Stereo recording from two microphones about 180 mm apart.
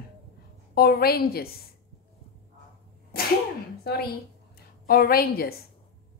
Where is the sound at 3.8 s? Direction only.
65° left (ahead or behind).